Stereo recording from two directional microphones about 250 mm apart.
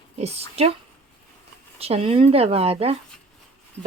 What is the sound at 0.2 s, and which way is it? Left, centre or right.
Speech, right.